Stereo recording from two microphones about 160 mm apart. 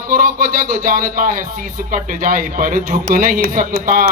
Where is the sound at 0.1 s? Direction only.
65° right (ahead or behind).